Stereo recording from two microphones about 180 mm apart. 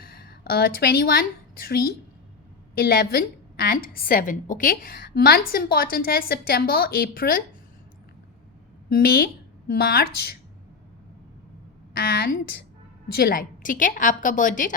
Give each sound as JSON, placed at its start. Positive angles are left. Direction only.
{"t": 0.0, "sound": "a woman's voice", "side_deg": 55}
{"t": 8.9, "sound": "a woman's voice", "side_deg": 55}
{"t": 11.9, "sound": "a woman's voice", "side_deg": 60}